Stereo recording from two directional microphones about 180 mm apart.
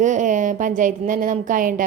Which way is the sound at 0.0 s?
45° right (ahead or behind).